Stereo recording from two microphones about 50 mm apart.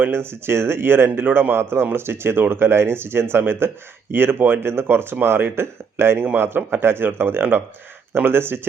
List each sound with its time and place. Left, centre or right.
0.0 s speech: right